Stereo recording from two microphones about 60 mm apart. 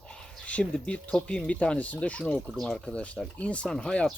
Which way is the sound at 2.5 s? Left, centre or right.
Centre.